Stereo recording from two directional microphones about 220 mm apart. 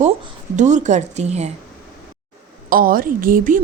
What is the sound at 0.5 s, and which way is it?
Speech, 35° right (ahead or behind).